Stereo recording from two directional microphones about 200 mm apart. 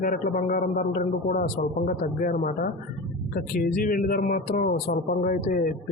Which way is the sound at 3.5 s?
45° left (ahead or behind).